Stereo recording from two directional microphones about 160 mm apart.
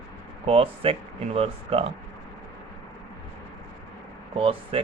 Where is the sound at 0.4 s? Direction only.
35° right (ahead or behind).